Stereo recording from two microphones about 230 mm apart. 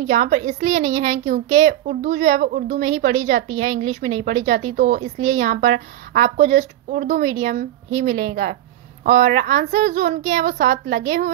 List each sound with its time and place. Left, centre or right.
0.1 s speech: right